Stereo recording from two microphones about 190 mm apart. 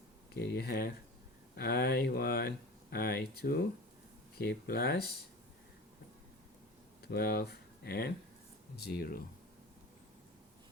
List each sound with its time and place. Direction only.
0.3 s speech: 55° left (ahead or behind)
7.1 s speech: 55° left (ahead or behind)